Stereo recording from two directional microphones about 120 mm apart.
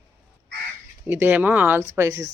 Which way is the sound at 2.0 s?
30° right (ahead or behind).